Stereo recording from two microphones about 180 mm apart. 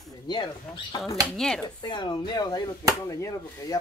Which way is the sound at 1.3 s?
5° left (ahead or behind).